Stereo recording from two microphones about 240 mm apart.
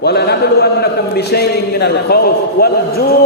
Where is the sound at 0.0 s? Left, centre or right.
Left.